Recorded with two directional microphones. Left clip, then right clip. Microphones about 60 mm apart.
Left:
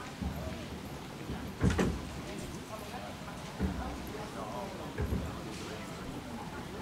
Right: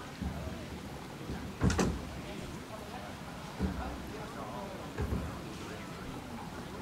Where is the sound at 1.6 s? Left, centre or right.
Right.